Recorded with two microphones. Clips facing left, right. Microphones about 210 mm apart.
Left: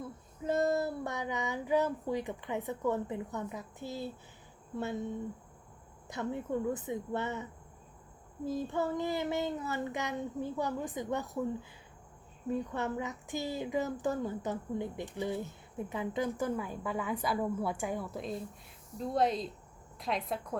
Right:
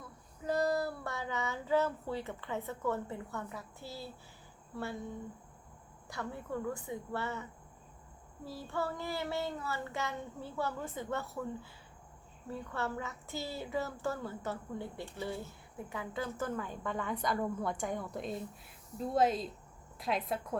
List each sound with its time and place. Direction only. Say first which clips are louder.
0.0 s a woman's voice: left 4 dB; 20° left (ahead or behind)
4.7 s child singing: left 4 dB; 20° left (ahead or behind)
6.1 s child singing: left 5 dB; 20° left (ahead or behind)
8.4 s child singing: left 5 dB; 20° left (ahead or behind)
12.5 s a woman's voice: left 5 dB; 20° left (ahead or behind); by 20.6 s centre (ahead or behind)